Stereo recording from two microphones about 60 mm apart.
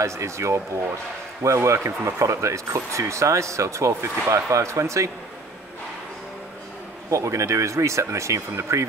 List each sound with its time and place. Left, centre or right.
0.0 s speech: right
7.1 s speech: right